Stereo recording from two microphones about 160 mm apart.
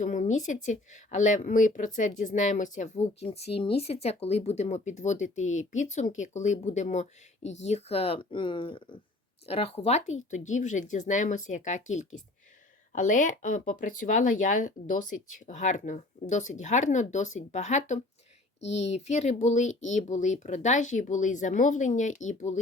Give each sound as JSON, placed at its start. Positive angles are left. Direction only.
{"t": 0.0, "sound": "speech", "side_deg": 50}